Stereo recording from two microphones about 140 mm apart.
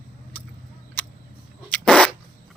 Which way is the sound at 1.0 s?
15° left (ahead or behind).